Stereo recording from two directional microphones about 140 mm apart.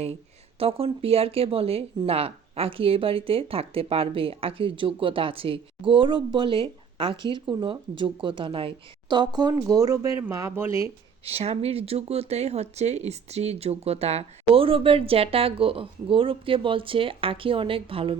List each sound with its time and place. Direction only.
0.6 s speech: 40° right (ahead or behind); by 10.8 s 20° right (ahead or behind)
11.3 s speech: 45° right (ahead or behind)